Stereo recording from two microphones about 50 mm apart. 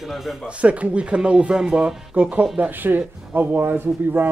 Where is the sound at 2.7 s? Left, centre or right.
Right.